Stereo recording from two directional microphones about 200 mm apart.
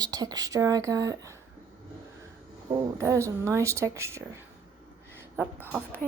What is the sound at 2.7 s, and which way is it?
Speech, 15° right (ahead or behind).